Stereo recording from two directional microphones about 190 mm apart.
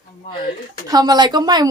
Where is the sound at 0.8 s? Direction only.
20° right (ahead or behind).